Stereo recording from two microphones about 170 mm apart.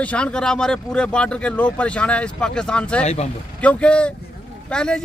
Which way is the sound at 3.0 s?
40° left (ahead or behind).